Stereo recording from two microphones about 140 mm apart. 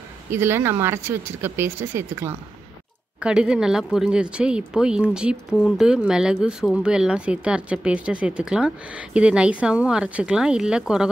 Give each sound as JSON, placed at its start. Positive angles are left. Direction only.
{"t": 0.3, "sound": "speech", "side_deg": -15}